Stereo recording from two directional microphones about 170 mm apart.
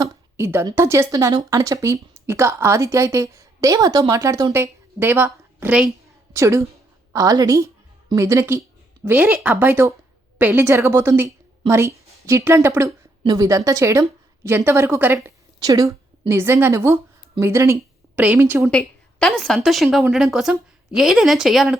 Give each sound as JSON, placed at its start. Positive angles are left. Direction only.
{"t": 0.0, "sound": "a woman's voice", "side_deg": -15}
{"t": 18.6, "sound": "a woman's voice", "side_deg": 5}